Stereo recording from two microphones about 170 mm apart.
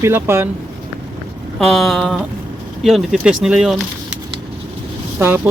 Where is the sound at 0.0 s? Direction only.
15° right (ahead or behind).